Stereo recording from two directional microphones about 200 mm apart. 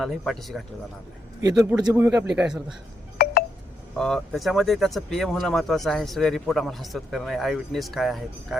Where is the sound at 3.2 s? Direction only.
50° left (ahead or behind).